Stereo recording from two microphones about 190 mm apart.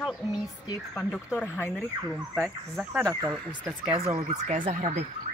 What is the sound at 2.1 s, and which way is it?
Speech, 10° right (ahead or behind).